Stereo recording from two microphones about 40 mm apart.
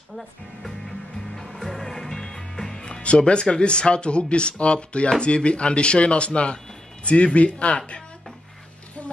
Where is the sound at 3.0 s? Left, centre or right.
Left.